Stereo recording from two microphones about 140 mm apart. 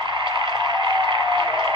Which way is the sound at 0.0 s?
35° right (ahead or behind).